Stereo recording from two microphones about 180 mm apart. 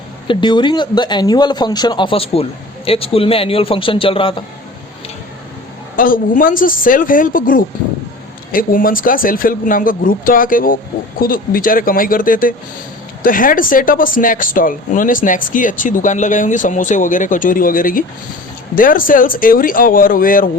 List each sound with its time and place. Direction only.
0.3 s speech: 25° left (ahead or behind)
6.0 s speech: 50° left (ahead or behind)